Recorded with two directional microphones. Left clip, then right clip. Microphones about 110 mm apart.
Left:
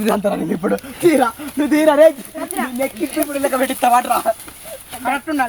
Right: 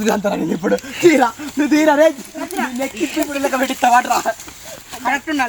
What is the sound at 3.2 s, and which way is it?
Speech, 5° right (ahead or behind).